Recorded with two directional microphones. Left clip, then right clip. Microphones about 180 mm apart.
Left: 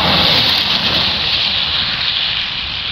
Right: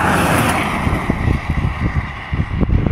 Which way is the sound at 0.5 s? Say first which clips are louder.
Left 5 dB; centre (ahead or behind).